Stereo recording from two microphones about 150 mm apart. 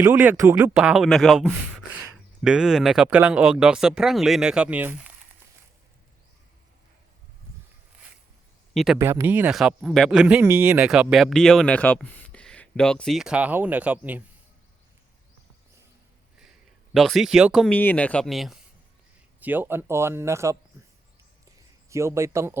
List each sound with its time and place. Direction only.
0.0 s speech: 10° right (ahead or behind)
8.7 s speech: centre (ahead or behind)
9.0 s speech: 15° right (ahead or behind)
16.9 s speech: centre (ahead or behind)
17.7 s speech: 10° left (ahead or behind)
19.4 s speech: 10° right (ahead or behind)
21.8 s speech: 20° right (ahead or behind)